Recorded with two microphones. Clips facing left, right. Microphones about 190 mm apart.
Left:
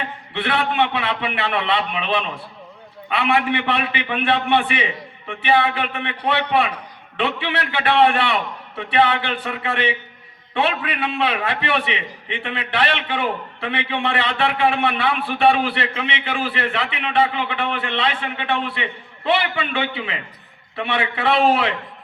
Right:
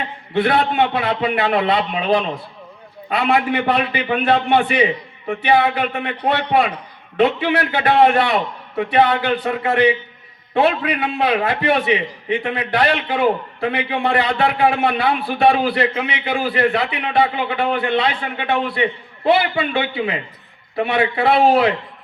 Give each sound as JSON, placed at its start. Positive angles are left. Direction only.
{"t": 0.3, "sound": "a man's voice", "side_deg": -40}